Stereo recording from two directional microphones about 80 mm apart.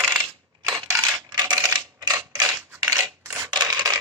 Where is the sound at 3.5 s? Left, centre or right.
Right.